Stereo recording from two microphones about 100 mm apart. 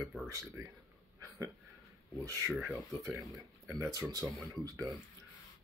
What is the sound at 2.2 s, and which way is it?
Speech, 35° right (ahead or behind).